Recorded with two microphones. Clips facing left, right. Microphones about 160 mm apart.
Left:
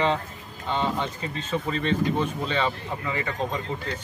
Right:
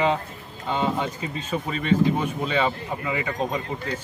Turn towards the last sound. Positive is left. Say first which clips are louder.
# right 2 dB
turn(degrees=-15)  # may be behind; listen again after turning